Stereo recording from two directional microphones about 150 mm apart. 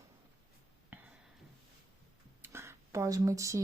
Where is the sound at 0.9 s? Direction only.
15° right (ahead or behind).